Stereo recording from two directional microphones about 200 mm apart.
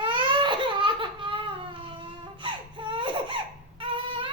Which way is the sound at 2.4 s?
25° right (ahead or behind).